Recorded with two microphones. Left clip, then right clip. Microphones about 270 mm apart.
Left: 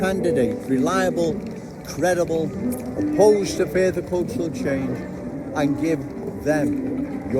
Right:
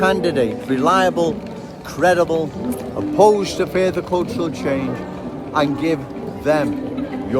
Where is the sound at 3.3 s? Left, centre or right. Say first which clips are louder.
Right 2 dB; centre.